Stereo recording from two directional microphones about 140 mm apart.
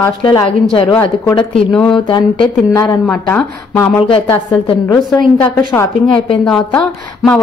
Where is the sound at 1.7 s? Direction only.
5° left (ahead or behind).